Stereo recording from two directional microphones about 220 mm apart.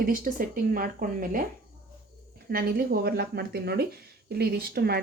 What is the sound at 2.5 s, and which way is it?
Speech, 40° right (ahead or behind).